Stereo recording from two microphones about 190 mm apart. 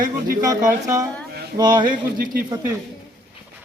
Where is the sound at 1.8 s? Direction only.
45° right (ahead or behind).